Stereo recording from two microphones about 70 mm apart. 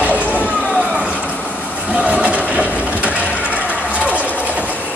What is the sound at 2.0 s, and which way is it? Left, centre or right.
Train, centre.